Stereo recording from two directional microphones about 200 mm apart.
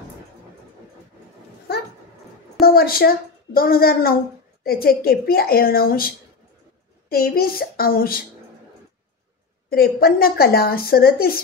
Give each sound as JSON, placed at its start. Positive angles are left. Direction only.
{"t": 2.6, "sound": "a woman's voice", "side_deg": 50}
{"t": 9.7, "sound": "a woman's voice", "side_deg": 50}